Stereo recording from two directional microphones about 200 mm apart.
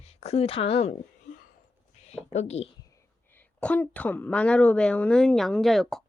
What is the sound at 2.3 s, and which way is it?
Speech, 35° left (ahead or behind).